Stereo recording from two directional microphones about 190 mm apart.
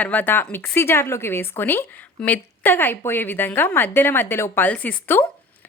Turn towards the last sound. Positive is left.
turn(degrees=10)  # may be behind; listen again after turning